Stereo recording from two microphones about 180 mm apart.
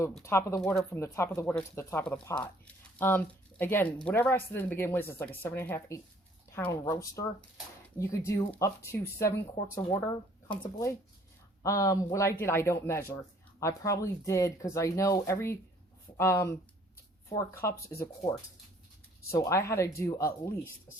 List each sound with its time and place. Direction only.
0.2 s speech: 15° left (ahead or behind)